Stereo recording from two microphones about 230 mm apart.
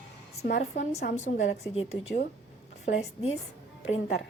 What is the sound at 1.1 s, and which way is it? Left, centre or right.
A woman's voice, left.